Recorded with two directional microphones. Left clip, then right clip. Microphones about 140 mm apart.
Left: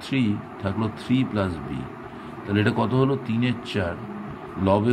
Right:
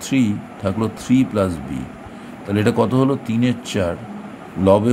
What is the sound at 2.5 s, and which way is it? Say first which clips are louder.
Speech: right 5 dB; 50° right (ahead or behind).